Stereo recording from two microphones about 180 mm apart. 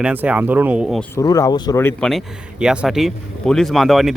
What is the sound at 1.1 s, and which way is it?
Speech, 20° left (ahead or behind).